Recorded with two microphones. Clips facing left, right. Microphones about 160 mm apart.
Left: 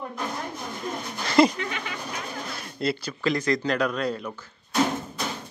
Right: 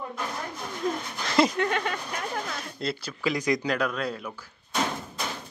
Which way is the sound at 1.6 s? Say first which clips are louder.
Right 6 dB; 55° right (ahead or behind).